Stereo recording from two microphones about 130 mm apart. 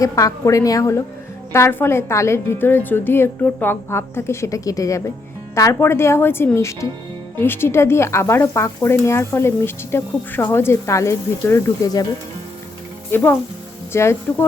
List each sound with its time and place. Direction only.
0.0 s speech: 25° left (ahead or behind)
13.1 s speech: 15° left (ahead or behind)